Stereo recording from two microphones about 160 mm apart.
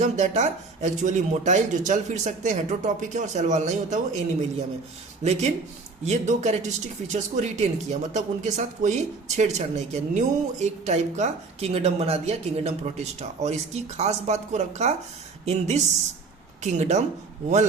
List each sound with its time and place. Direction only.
0.0 s speech: 45° right (ahead or behind)
5.2 s speech: 45° right (ahead or behind)